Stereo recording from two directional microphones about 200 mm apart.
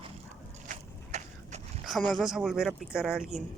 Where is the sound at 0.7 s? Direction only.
35° right (ahead or behind).